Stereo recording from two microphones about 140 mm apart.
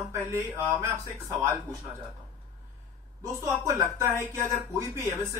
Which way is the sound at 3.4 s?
20° right (ahead or behind).